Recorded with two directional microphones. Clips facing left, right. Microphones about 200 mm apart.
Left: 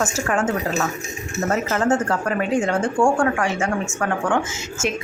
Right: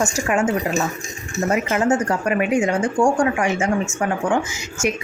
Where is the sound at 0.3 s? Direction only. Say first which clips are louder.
Right 3 dB; 10° right (ahead or behind).